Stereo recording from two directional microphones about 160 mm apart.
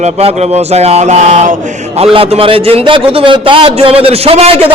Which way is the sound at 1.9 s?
35° right (ahead or behind).